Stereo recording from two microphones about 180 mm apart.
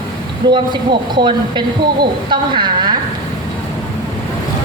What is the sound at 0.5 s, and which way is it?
A woman's voice, 25° right (ahead or behind).